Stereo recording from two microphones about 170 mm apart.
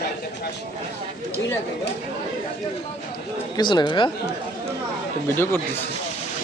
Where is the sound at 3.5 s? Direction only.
25° left (ahead or behind).